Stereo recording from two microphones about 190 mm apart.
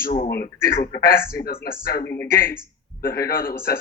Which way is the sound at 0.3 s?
55° left (ahead or behind).